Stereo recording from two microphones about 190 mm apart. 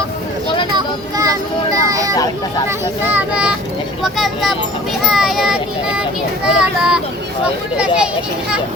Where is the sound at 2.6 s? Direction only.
10° right (ahead or behind).